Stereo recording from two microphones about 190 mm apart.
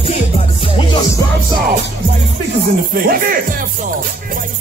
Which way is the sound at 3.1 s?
50° right (ahead or behind).